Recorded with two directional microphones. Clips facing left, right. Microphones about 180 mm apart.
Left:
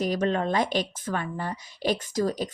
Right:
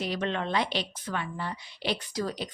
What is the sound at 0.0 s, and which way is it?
A woman's voice, 45° left (ahead or behind).